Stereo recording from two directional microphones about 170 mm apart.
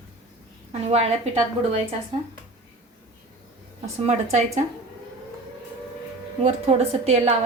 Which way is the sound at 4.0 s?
40° right (ahead or behind).